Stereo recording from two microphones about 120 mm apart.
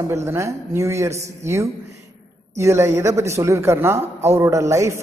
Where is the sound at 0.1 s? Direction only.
25° right (ahead or behind).